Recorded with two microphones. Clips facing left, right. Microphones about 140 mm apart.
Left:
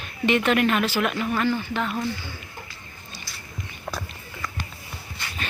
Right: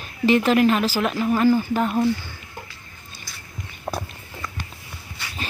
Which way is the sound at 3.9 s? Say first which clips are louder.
Right 5 dB; 25° right (ahead or behind).